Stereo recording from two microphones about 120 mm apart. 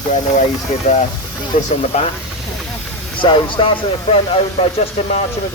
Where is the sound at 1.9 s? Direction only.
70° left (ahead or behind).